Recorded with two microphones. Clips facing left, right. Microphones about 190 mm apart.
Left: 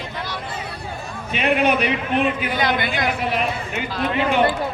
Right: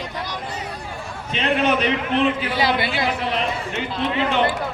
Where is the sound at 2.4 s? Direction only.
30° right (ahead or behind).